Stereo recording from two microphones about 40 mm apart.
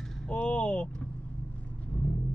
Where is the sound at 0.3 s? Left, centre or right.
Left.